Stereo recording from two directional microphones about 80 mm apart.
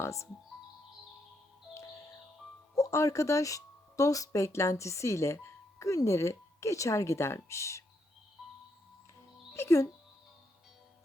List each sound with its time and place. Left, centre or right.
0.0 s speech: left
2.7 s speech: left
8.4 s music: centre
9.6 s speech: left